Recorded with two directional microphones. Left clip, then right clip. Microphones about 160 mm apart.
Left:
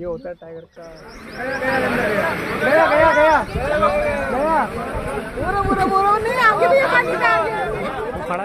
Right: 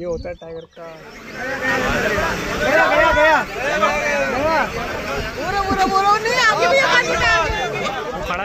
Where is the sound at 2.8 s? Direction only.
75° left (ahead or behind).